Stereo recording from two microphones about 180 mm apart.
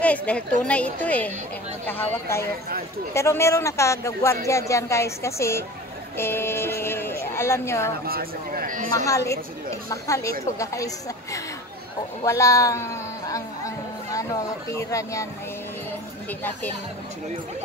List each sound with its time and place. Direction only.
0.0 s speech: 5° left (ahead or behind)
6.1 s a sound: 15° left (ahead or behind)
8.1 s a man's voice: 55° right (ahead or behind)
8.9 s speech: 15° left (ahead or behind)
12.3 s speech: 20° left (ahead or behind)
14.7 s speech: 15° left (ahead or behind)